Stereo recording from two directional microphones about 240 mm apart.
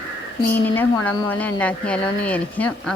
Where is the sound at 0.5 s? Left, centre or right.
Centre.